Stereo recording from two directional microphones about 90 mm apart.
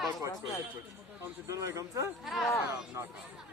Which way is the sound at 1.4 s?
35° right (ahead or behind).